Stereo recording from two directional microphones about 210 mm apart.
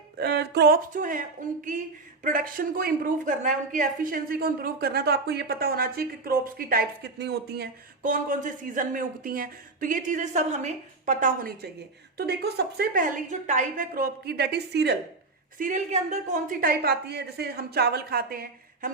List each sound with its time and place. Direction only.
0.2 s a sound: 50° right (ahead or behind)
2.2 s a woman's voice: 40° right (ahead or behind)
15.5 s a woman's voice: 35° right (ahead or behind)